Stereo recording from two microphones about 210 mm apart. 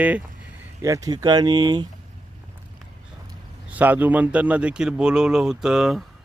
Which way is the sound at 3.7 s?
10° right (ahead or behind).